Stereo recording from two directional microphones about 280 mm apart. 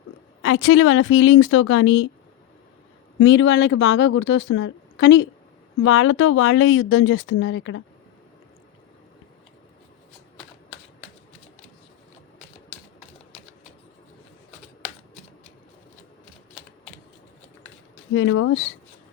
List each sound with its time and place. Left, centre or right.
0.4 s speech: left
3.2 s speech: left
18.1 s speech: left